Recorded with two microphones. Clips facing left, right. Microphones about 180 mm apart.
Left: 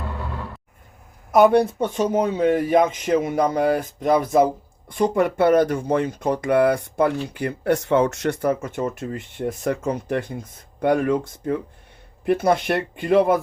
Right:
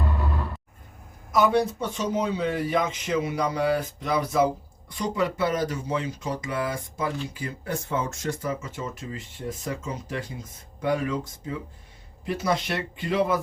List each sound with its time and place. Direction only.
1.3 s speech: 55° left (ahead or behind)